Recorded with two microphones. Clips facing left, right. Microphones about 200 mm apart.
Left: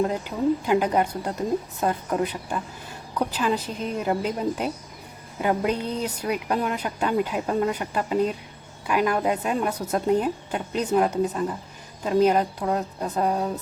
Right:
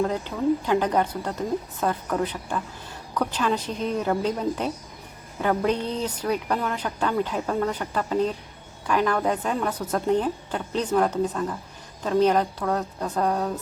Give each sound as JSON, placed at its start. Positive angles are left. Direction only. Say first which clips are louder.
{"t": 0.1, "sound": "a woman's voice", "louder": "even", "side_deg": 10}
{"t": 1.8, "sound": "a woman's voice", "louder": "left 1 dB", "side_deg": 20}
{"t": 2.1, "sound": "a woman's voice", "louder": "left 1 dB", "side_deg": 10}